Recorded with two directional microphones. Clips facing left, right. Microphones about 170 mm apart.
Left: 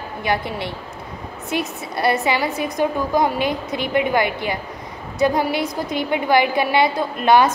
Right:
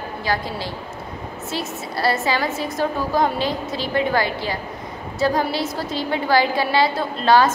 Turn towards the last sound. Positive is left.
turn(degrees=20)  # may be behind; listen again after turning